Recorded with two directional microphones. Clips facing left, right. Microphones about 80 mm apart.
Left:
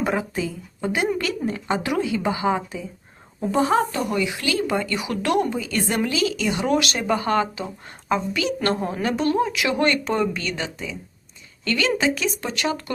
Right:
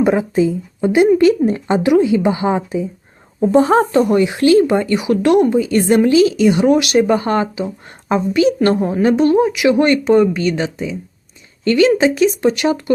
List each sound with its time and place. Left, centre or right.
0.0 s a woman's voice: right
3.4 s a woman's voice: right
4.6 s a woman's voice: right
7.1 s a woman's voice: right
7.5 s a woman's voice: centre